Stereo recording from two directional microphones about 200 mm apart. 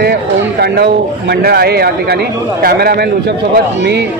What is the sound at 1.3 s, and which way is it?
A man's voice, 50° right (ahead or behind).